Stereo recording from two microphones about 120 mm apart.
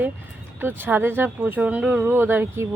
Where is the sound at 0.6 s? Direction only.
15° right (ahead or behind).